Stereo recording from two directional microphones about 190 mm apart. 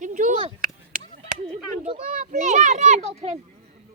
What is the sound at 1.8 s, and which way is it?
A child's voice, 45° right (ahead or behind).